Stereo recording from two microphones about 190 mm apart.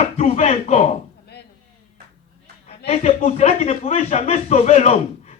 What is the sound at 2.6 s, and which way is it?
A man's voice, 35° left (ahead or behind).